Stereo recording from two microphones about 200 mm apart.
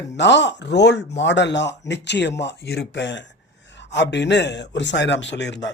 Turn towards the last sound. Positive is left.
turn(degrees=60)  # may be behind; listen again after turning